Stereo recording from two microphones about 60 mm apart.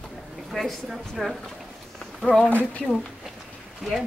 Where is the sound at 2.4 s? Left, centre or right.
Left.